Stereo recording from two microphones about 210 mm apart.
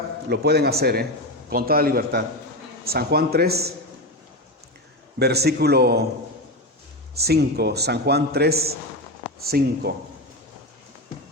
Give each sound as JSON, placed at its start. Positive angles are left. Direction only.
{"t": 0.3, "sound": "a man's voice", "side_deg": -50}
{"t": 5.2, "sound": "a man's voice", "side_deg": -50}
{"t": 7.2, "sound": "a man's voice", "side_deg": -50}